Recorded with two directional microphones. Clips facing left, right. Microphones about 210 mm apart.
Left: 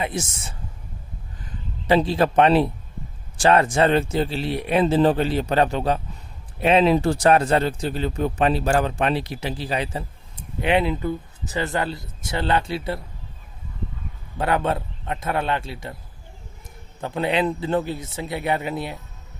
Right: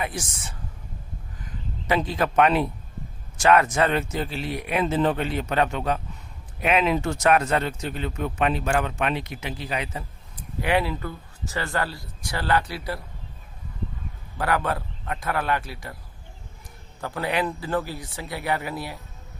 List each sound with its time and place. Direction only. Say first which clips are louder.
0.0 s speech: left 4 dB; 25° left (ahead or behind)
14.3 s speech: left 3 dB; 25° left (ahead or behind)
17.0 s speech: left 4 dB; 20° left (ahead or behind)